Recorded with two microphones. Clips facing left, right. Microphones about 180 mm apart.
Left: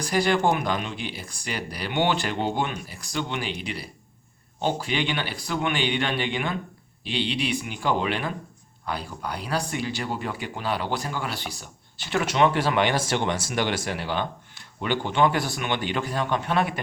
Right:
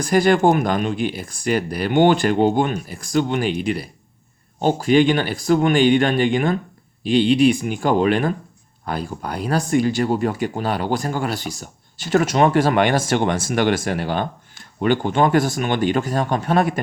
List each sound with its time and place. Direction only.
0.0 s speech: 50° right (ahead or behind)